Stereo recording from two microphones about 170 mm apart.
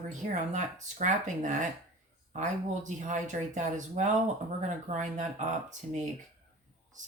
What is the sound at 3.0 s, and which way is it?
Speech, 45° right (ahead or behind).